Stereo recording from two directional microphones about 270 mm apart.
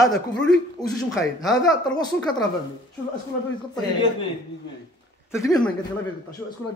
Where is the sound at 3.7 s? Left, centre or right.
Centre.